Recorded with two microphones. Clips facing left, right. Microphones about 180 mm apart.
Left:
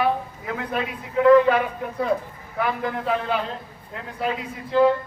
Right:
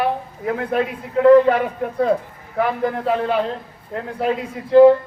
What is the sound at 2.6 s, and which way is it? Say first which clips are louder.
Speech: right 5 dB; 45° right (ahead or behind).